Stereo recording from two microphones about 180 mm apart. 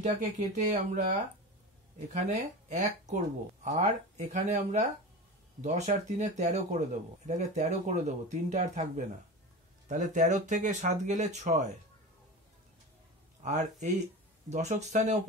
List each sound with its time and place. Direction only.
0.0 s speech: 40° right (ahead or behind)
2.1 s speech: 40° right (ahead or behind)
13.4 s speech: 40° right (ahead or behind)